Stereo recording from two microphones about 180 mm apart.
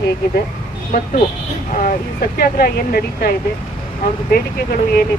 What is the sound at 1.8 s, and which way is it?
Speech, 55° left (ahead or behind).